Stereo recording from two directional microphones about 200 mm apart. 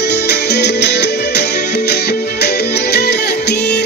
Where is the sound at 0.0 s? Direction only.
55° left (ahead or behind).